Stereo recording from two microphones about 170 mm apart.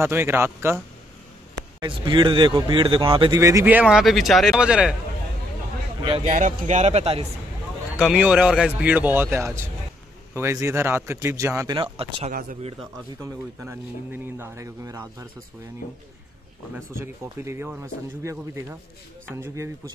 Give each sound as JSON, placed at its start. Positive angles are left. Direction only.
{"t": 0.0, "sound": "speech", "side_deg": -15}
{"t": 1.8, "sound": "speech", "side_deg": -30}
{"t": 3.3, "sound": "speech", "side_deg": -20}
{"t": 6.2, "sound": "speech", "side_deg": -50}
{"t": 8.0, "sound": "speech", "side_deg": -5}
{"t": 12.3, "sound": "speech", "side_deg": -55}
{"t": 13.2, "sound": "speech", "side_deg": -15}
{"t": 16.7, "sound": "speech", "side_deg": -15}